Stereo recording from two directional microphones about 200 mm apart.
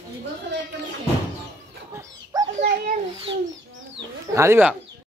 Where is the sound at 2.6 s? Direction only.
45° right (ahead or behind).